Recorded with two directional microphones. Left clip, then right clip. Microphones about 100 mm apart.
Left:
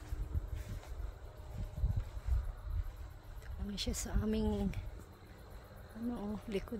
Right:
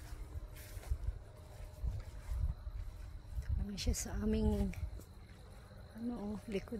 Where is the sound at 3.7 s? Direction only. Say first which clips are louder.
Left 2 dB; 5° left (ahead or behind).